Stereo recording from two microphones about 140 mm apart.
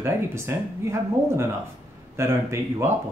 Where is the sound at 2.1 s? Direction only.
20° right (ahead or behind).